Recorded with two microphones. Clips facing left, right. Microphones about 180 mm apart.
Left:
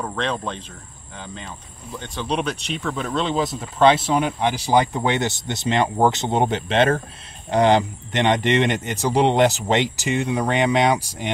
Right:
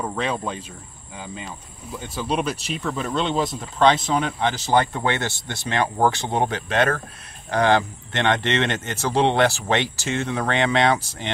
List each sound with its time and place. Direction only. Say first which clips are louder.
0.0 s speech: even; 5° right (ahead or behind); by 11.3 s 15° left (ahead or behind)